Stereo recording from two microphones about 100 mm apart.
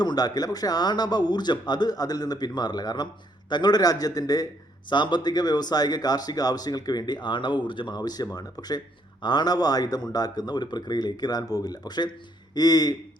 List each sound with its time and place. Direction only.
0.0 s speech: 45° left (ahead or behind)